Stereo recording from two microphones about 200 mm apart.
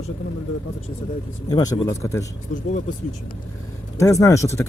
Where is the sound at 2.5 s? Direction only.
40° left (ahead or behind).